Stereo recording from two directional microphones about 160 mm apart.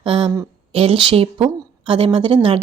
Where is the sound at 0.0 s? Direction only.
30° right (ahead or behind).